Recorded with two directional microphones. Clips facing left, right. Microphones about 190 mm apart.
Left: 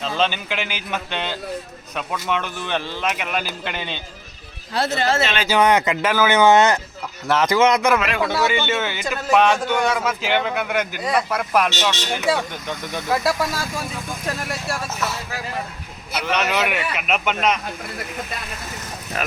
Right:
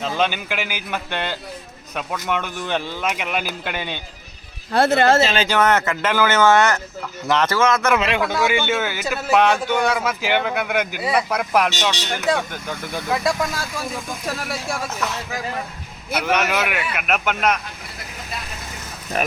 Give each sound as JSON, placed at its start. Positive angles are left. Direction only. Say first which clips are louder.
{"t": 0.0, "sound": "a man's voice", "louder": "even", "side_deg": -15}
{"t": 4.7, "sound": "speech", "louder": "right 6 dB", "side_deg": -55}
{"t": 5.1, "sound": "speech", "louder": "right 4 dB", "side_deg": -35}
{"t": 5.5, "sound": "speech", "louder": "left 1 dB", "side_deg": 15}
{"t": 7.9, "sound": "speech", "louder": "right 2 dB", "side_deg": -25}
{"t": 8.2, "sound": "speech", "louder": "even", "side_deg": 10}
{"t": 8.4, "sound": "a man's voice", "louder": "right 1 dB", "side_deg": -10}
{"t": 12.1, "sound": "speech", "louder": "even", "side_deg": 10}
{"t": 14.7, "sound": "speech", "louder": "even", "side_deg": 5}
{"t": 16.2, "sound": "a man's voice", "louder": "even", "side_deg": -10}